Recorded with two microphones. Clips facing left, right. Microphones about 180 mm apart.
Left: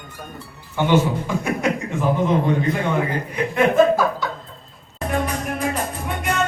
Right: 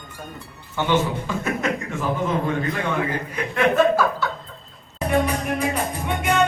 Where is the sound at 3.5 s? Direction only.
15° left (ahead or behind).